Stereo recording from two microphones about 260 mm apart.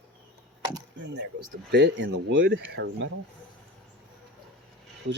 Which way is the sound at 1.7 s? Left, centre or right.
Right.